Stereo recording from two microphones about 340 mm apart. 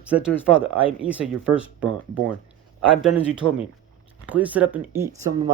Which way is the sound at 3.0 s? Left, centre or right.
Centre.